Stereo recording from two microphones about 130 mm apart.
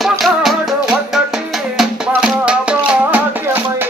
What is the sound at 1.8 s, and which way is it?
Music, 5° right (ahead or behind).